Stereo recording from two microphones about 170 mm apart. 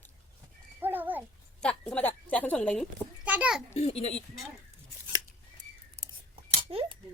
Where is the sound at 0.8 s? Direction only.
10° right (ahead or behind).